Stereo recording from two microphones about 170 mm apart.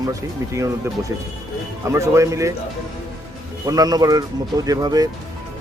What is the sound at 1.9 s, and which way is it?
Speech, 15° right (ahead or behind).